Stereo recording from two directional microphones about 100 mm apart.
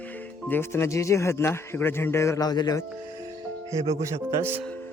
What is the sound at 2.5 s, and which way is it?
Speech, 40° left (ahead or behind).